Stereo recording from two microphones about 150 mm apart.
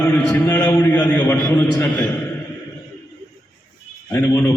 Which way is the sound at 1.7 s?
20° left (ahead or behind).